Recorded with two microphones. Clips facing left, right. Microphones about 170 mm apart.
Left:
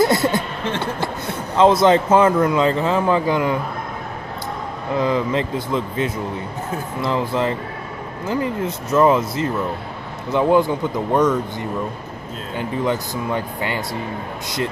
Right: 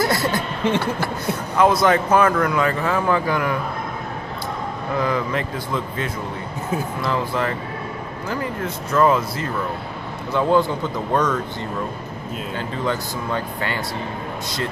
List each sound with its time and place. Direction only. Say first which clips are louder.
0.0 s a sound: left 4 dB; 20° left (ahead or behind)
0.7 s a man's voice: right 1 dB; 20° left (ahead or behind)
4.9 s a man's voice: left 3 dB; 20° left (ahead or behind)
12.5 s speech: left 4 dB; 15° left (ahead or behind)